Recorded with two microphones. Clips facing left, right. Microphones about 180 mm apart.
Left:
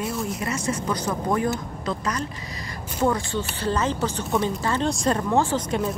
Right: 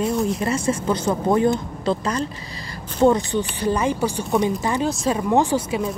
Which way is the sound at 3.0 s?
20° right (ahead or behind).